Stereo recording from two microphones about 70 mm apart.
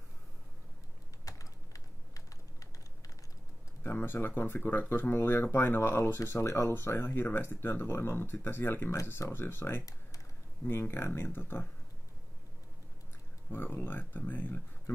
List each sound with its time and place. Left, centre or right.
1.2 s typing: left
3.8 s speech: left
13.5 s speech: left